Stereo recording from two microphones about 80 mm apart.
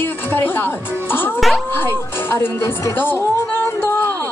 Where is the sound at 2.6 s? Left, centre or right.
Left.